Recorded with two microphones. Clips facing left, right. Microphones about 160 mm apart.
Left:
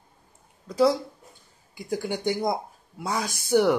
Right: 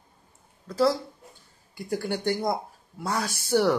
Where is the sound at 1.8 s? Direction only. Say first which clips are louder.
Even; 10° left (ahead or behind).